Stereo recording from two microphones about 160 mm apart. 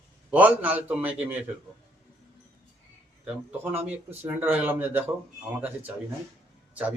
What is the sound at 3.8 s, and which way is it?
Speech, 40° right (ahead or behind).